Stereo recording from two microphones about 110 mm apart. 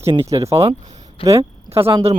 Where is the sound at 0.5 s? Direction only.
70° right (ahead or behind).